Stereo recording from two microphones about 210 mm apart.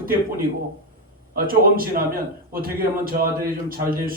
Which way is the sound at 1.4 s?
45° right (ahead or behind).